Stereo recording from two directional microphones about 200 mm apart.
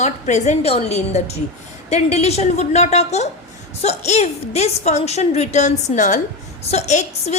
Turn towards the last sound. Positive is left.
turn(degrees=35)  # may be behind; listen again after turning